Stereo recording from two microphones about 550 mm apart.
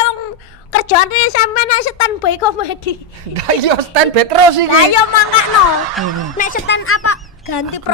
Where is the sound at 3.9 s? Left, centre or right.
Right.